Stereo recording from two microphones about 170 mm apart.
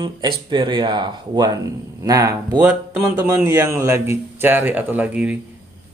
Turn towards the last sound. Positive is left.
turn(degrees=-10)  # may be behind; listen again after turning